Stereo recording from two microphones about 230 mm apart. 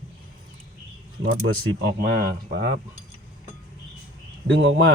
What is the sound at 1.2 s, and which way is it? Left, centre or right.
Speech, right.